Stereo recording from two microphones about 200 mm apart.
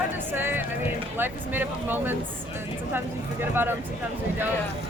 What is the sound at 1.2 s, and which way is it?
Speech, 10° right (ahead or behind).